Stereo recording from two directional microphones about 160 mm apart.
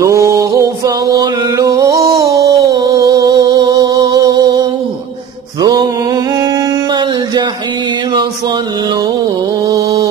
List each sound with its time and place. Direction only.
0.0 s mantra: 20° right (ahead or behind)
5.6 s music: 25° right (ahead or behind)
9.7 s mantra: 25° right (ahead or behind)